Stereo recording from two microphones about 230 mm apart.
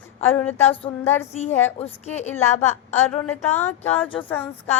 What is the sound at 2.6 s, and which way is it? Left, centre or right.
Speech, centre.